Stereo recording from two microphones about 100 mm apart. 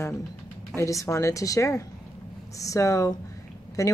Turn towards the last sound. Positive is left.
turn(degrees=35)  # may be behind; listen again after turning